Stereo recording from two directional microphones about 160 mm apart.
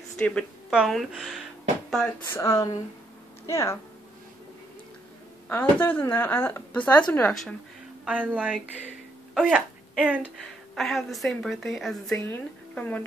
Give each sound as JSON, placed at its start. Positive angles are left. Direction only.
{"t": 0.2, "sound": "a woman's voice", "side_deg": 5}
{"t": 2.3, "sound": "speech", "side_deg": 20}
{"t": 5.5, "sound": "a woman's voice", "side_deg": 10}
{"t": 8.0, "sound": "a woman's voice", "side_deg": -10}